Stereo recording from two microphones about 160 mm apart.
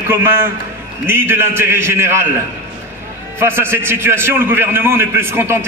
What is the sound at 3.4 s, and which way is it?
A man's voice, 15° right (ahead or behind).